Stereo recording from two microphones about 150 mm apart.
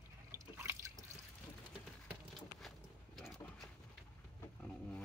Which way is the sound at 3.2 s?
Centre (ahead or behind).